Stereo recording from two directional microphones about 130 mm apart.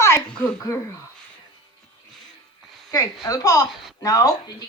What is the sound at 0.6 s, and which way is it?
Speech, 20° left (ahead or behind).